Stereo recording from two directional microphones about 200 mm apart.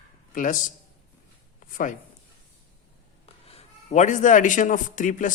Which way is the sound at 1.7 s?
40° left (ahead or behind).